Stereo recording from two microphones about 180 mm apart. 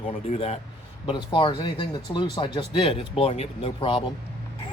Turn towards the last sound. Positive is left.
turn(degrees=30)  # may be behind; listen again after turning